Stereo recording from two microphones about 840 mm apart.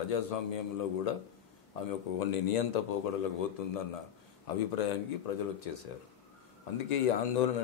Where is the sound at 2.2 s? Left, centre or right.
Left.